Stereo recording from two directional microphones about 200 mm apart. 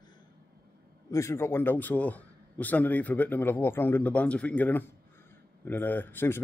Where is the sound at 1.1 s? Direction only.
15° left (ahead or behind).